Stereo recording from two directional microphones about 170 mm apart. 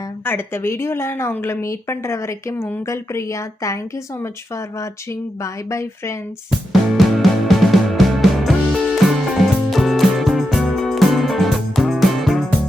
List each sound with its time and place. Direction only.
0.3 s a woman's voice: 15° left (ahead or behind)
6.9 s music: centre (ahead or behind)